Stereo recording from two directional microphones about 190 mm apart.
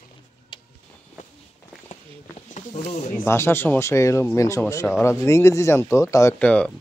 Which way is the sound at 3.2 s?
15° left (ahead or behind).